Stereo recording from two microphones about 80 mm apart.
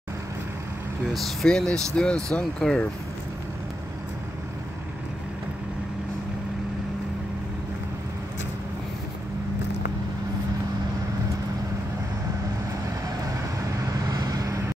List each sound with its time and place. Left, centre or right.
1.1 s speech: centre
13.9 s vehicle: right